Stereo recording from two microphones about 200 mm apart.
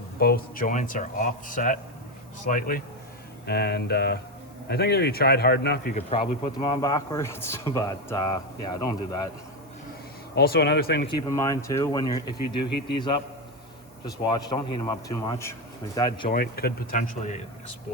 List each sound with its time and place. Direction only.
0.2 s a man's voice: 50° left (ahead or behind)
6.0 s speech: 30° left (ahead or behind)
10.3 s a man's voice: 50° left (ahead or behind)
11.1 s speech: 15° left (ahead or behind)
14.0 s speech: 20° left (ahead or behind)
16.3 s a man's voice: 50° left (ahead or behind)